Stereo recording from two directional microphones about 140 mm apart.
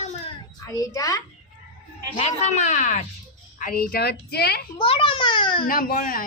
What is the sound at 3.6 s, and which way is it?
Speech, 85° left.